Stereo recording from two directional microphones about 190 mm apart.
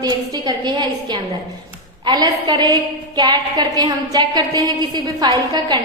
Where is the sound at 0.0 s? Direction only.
20° right (ahead or behind).